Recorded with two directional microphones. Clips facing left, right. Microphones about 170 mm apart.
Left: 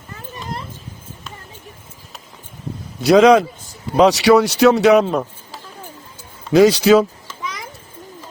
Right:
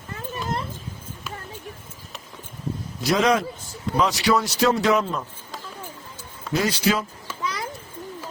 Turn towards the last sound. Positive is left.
turn(degrees=85)